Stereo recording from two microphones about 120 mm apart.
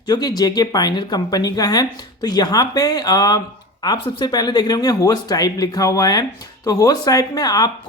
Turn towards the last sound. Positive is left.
turn(degrees=30)  # may be behind; listen again after turning